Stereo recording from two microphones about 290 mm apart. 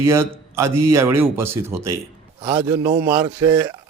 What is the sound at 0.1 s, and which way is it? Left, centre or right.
Speech, centre.